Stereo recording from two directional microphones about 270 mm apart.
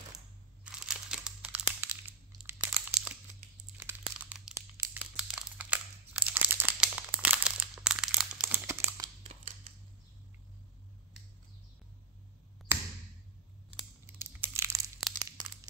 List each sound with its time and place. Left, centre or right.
0.7 s crumpling: centre
9.2 s scissors: right
12.7 s a sound: centre
14.0 s crumpling: centre